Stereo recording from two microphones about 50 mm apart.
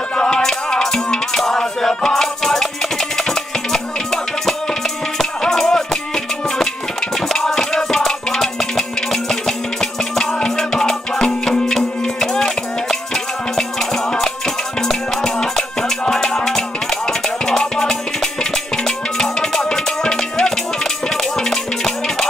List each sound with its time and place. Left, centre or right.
0.1 s music: centre